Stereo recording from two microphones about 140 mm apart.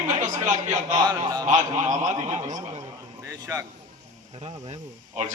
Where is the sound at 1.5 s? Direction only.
55° right (ahead or behind).